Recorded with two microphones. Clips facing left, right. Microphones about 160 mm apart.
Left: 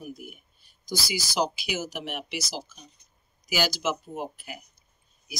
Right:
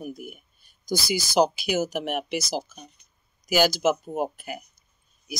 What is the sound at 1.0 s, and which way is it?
Speech, 50° right (ahead or behind).